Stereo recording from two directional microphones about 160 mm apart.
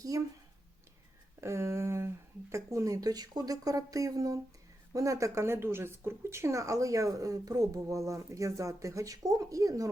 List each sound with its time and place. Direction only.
0.1 s speech: 20° right (ahead or behind)
1.4 s speech: 15° right (ahead or behind)